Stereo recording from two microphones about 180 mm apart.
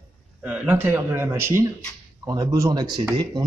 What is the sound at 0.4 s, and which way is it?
A man's voice, 10° right (ahead or behind).